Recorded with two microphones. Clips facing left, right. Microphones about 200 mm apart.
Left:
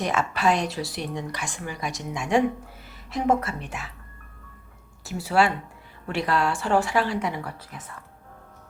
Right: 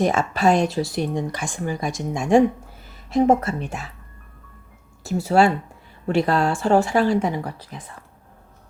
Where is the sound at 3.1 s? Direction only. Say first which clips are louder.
Right 6 dB; 25° right (ahead or behind).